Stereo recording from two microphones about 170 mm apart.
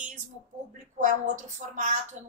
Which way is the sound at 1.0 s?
50° right (ahead or behind).